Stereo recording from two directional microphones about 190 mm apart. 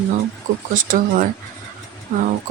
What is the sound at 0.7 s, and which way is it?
Speech, 45° right (ahead or behind).